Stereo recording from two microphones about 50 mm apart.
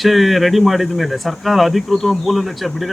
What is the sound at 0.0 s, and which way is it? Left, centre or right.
A man's voice, centre.